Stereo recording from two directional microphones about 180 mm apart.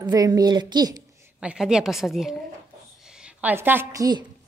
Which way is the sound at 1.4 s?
5° right (ahead or behind).